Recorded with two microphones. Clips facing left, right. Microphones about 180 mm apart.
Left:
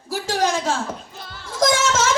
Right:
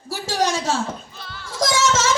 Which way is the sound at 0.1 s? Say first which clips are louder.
Left 1 dB; 55° left (ahead or behind).